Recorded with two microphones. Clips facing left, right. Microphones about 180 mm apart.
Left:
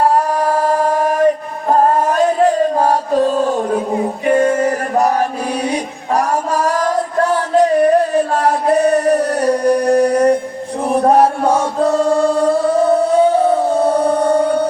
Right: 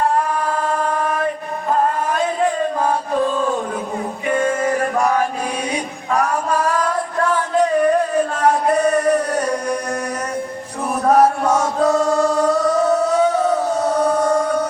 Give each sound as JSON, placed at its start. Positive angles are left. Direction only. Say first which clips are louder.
{"t": 0.3, "sound": "mantra", "louder": "left 5 dB", "side_deg": 40}
{"t": 1.7, "sound": "music", "louder": "left 6 dB", "side_deg": 40}
{"t": 4.3, "sound": "male singing", "louder": "left 5 dB", "side_deg": 40}
{"t": 5.7, "sound": "a sound", "louder": "left 3 dB", "side_deg": 40}
{"t": 10.8, "sound": "chant", "louder": "left 3 dB", "side_deg": 30}